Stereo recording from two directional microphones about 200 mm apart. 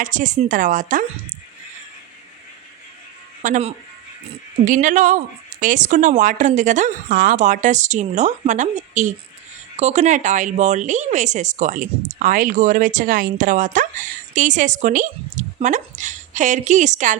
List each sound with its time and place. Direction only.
0.0 s speech: 40° right (ahead or behind)
3.4 s speech: 35° right (ahead or behind)